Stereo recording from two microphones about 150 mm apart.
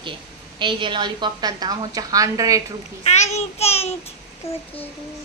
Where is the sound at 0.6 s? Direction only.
35° right (ahead or behind).